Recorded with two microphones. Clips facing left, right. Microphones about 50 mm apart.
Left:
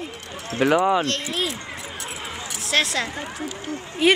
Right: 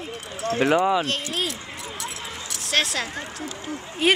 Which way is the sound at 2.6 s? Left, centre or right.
Centre.